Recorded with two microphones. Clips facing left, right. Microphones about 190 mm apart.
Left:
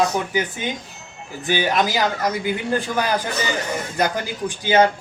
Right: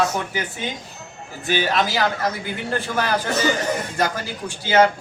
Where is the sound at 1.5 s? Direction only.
15° left (ahead or behind).